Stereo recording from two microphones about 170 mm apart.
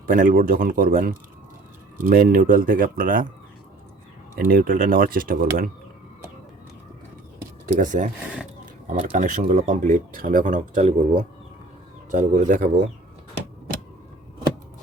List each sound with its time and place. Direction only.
0.1 s speech: 55° right (ahead or behind)
4.4 s speech: 55° right (ahead or behind)
7.8 s speech: 50° right (ahead or behind)
10.8 s speech: 40° right (ahead or behind)